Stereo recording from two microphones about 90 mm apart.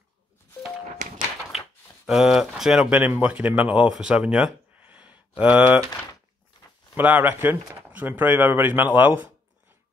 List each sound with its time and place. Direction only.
2.0 s speech: 5° right (ahead or behind)
3.0 s speech: 20° right (ahead or behind)
7.0 s speech: 20° right (ahead or behind)